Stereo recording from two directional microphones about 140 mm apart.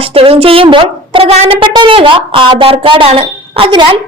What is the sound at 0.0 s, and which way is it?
Speech, 45° right (ahead or behind).